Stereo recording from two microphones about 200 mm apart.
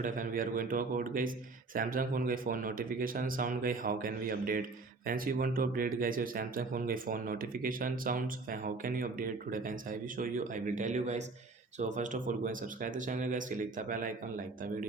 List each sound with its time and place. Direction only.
0.0 s speech: 40° right (ahead or behind)